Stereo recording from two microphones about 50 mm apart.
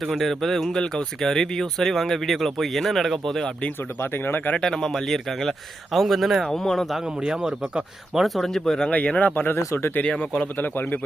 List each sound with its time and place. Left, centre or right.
0.1 s speech: centre
4.0 s speech: left
4.5 s speech: centre
6.5 s speech: centre
7.2 s speech: centre
8.2 s speech: centre
8.9 s a man's voice: left
9.3 s speech: left
10.1 s speech: centre
10.4 s a man's voice: left